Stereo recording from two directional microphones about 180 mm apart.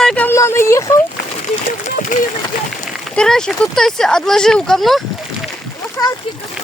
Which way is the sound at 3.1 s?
5° left (ahead or behind).